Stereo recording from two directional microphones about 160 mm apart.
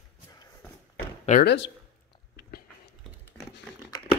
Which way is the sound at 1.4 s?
90° left.